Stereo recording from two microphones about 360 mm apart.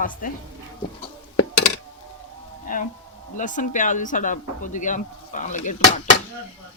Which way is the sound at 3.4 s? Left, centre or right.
Left.